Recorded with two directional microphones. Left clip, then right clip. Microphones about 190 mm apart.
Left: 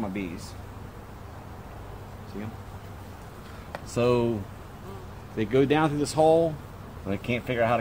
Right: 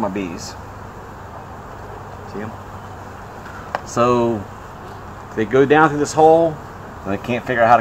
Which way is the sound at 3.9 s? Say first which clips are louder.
Right 8 dB; 30° left (ahead or behind).